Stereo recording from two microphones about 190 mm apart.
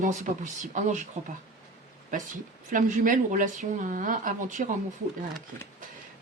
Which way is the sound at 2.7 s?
45° right (ahead or behind).